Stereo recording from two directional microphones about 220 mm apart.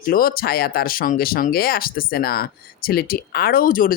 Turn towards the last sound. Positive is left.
turn(degrees=40)  # may be behind; listen again after turning